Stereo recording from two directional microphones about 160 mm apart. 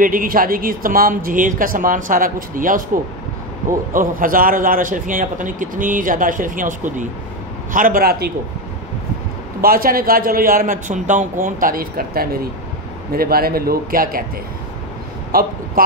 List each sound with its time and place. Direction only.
0.0 s a man's voice: 60° right (ahead or behind)
9.6 s a man's voice: 65° right (ahead or behind)
15.3 s speech: 70° right (ahead or behind)